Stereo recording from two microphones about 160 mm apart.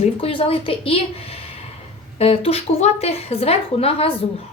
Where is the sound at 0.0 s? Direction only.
35° left (ahead or behind).